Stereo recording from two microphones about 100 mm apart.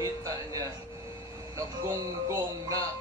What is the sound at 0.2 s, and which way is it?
Music, 35° right (ahead or behind).